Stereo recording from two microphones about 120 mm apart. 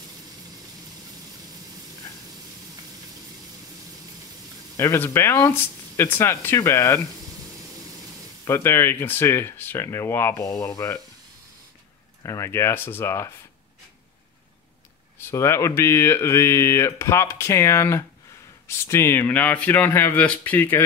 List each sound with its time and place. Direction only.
4.7 s speech: 20° left (ahead or behind)
8.5 s speech: 25° left (ahead or behind)
12.2 s speech: 25° left (ahead or behind)
15.1 s speech: 25° left (ahead or behind)